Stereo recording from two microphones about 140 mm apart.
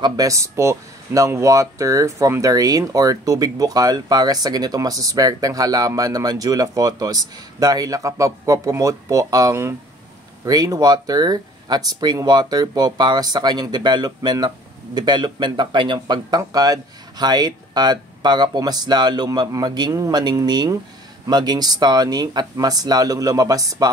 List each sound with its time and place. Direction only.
0.0 s speech: 25° right (ahead or behind)